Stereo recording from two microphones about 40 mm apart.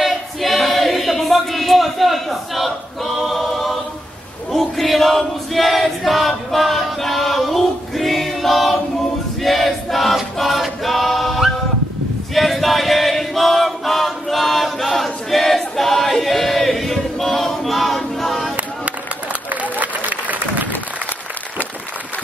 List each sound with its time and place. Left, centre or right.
0.0 s a sound: centre
4.5 s choir: centre
19.5 s applause: right